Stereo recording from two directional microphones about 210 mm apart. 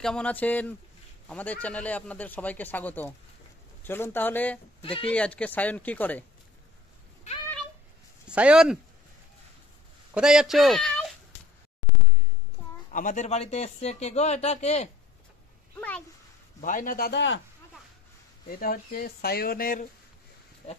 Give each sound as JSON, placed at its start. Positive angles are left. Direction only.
{"t": 0.0, "sound": "speech", "side_deg": 5}
{"t": 4.8, "sound": "speech", "side_deg": 25}
{"t": 5.1, "sound": "speech", "side_deg": 5}
{"t": 8.3, "sound": "speech", "side_deg": -5}
{"t": 10.1, "sound": "speech", "side_deg": -5}
{"t": 12.9, "sound": "speech", "side_deg": 35}
{"t": 16.6, "sound": "speech", "side_deg": 40}
{"t": 18.5, "sound": "speech", "side_deg": 45}